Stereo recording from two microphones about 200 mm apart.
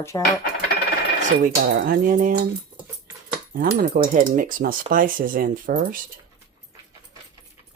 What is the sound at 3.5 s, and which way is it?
Speech, 45° right (ahead or behind).